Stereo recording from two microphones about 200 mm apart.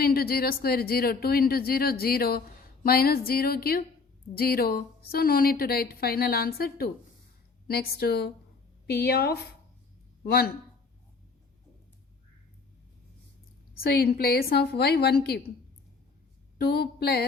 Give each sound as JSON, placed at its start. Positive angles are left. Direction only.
{"t": 0.0, "sound": "a woman's voice", "side_deg": 50}
{"t": 13.8, "sound": "a woman's voice", "side_deg": 50}
{"t": 16.6, "sound": "a woman's voice", "side_deg": 50}